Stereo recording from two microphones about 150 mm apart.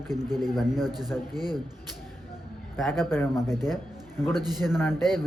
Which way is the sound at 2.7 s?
Centre (ahead or behind).